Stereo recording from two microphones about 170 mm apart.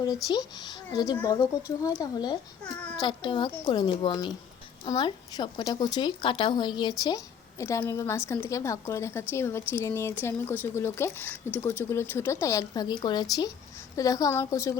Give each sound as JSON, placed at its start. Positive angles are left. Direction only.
{"t": 0.0, "sound": "speech", "side_deg": 25}
{"t": 7.6, "sound": "a woman's voice", "side_deg": 15}